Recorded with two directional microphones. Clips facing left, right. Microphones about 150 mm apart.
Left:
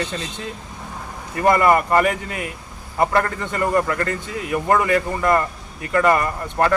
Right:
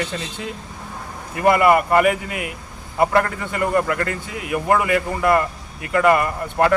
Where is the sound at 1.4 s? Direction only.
10° right (ahead or behind).